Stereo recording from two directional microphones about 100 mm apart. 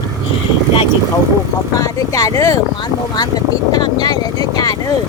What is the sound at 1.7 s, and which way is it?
Speech, 30° left (ahead or behind).